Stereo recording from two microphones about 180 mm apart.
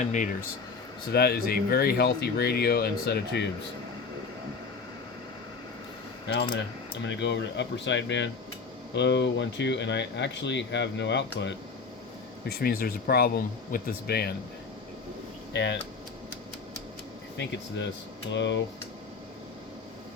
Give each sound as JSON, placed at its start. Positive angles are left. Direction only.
{"t": 0.0, "sound": "speech", "side_deg": 45}
{"t": 1.1, "sound": "speech", "side_deg": 60}
{"t": 7.1, "sound": "speech", "side_deg": 80}
{"t": 12.5, "sound": "speech", "side_deg": 55}
{"t": 15.5, "sound": "speech", "side_deg": 80}
{"t": 17.3, "sound": "speech", "side_deg": 75}